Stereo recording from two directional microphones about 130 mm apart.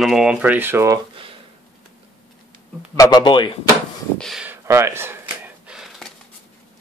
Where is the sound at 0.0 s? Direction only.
5° right (ahead or behind); by 0.9 s 20° right (ahead or behind).